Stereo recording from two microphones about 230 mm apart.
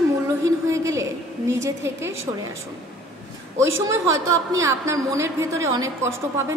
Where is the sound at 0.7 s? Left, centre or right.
Centre.